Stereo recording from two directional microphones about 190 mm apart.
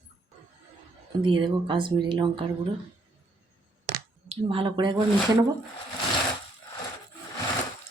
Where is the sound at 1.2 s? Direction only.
25° right (ahead or behind).